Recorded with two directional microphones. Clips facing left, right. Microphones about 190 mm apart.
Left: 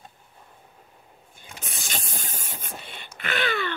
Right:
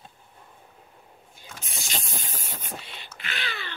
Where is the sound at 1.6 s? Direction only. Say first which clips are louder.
Left 1 dB; 50° left (ahead or behind).